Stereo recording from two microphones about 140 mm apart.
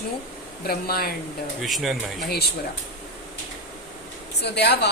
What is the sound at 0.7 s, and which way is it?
Speech, 90° left.